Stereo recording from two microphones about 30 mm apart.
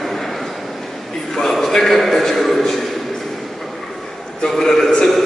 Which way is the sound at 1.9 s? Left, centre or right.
Centre.